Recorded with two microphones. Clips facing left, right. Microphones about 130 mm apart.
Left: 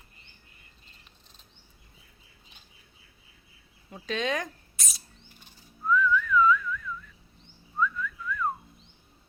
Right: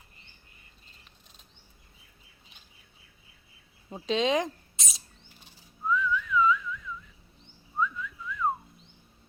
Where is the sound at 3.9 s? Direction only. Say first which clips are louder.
Right 4 dB; 25° right (ahead or behind).